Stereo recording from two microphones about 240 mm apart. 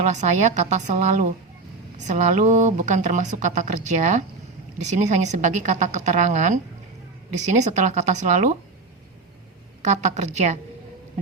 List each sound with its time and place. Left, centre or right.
0.0 s a woman's voice: right
7.6 s a woman's voice: right
9.8 s a woman's voice: right